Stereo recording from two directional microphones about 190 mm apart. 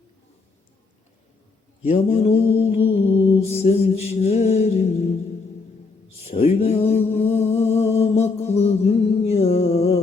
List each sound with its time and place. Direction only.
1.9 s mantra: 35° left (ahead or behind)
3.5 s music: 35° left (ahead or behind)
6.2 s a sound: 35° left (ahead or behind)